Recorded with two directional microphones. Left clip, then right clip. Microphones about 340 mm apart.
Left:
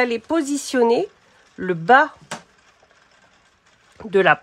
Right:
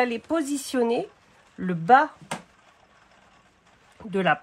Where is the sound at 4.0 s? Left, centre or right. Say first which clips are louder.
Left 8 dB; left.